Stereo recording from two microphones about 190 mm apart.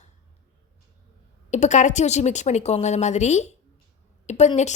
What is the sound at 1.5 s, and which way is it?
A woman's voice, 40° left (ahead or behind).